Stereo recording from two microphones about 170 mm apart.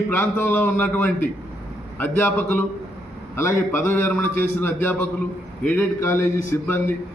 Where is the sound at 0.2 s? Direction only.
10° left (ahead or behind).